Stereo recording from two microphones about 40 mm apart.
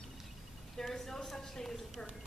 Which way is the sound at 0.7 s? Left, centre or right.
Centre.